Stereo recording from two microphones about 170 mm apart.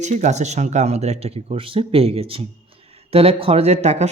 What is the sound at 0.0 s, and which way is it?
Speech, 45° right (ahead or behind).